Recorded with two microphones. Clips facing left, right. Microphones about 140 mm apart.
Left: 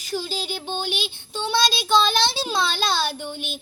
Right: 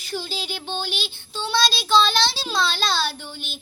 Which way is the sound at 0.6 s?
15° left (ahead or behind).